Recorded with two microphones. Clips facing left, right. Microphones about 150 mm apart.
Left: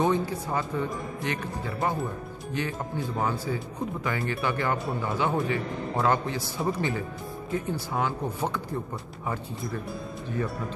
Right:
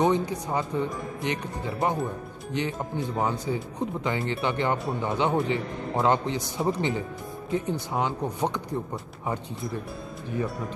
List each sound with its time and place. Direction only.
0.0 s speech: 20° right (ahead or behind)